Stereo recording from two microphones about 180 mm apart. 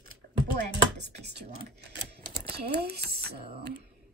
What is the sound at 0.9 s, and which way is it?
Speech, 70° right (ahead or behind).